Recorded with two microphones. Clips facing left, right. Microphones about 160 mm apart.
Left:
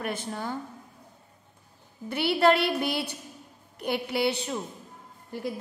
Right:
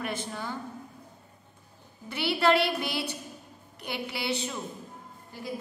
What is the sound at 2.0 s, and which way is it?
A woman's voice, 50° left (ahead or behind).